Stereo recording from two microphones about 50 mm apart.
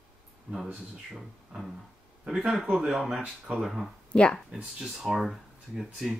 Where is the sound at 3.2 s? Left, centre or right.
Right.